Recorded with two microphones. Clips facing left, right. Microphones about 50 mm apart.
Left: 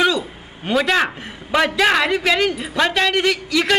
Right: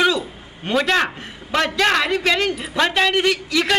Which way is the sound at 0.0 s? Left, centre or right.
Centre.